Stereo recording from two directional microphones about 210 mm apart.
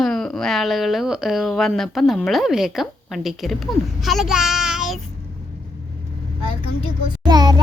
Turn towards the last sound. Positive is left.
turn(degrees=-20)  # may be behind; listen again after turning